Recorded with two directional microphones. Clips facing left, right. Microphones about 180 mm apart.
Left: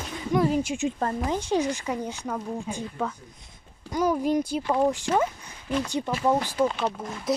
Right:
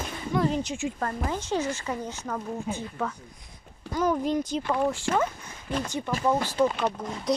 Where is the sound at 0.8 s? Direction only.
25° left (ahead or behind).